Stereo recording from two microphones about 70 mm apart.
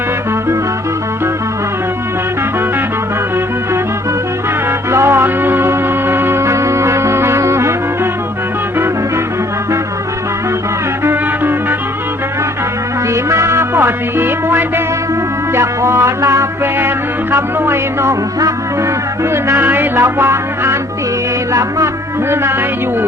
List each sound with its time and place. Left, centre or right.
4.9 s music: right
11.0 s music: right
13.3 s music: right
19.3 s music: right